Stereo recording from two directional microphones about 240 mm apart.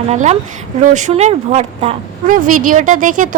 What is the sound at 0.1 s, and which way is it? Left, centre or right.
A woman's voice, right.